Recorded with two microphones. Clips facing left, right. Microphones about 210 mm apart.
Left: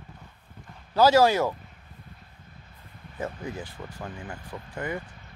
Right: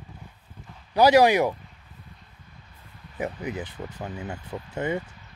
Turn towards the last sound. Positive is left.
turn(degrees=-25)  # may be behind; listen again after turning